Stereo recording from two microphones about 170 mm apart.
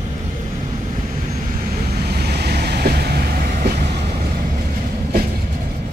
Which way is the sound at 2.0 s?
70° right (ahead or behind).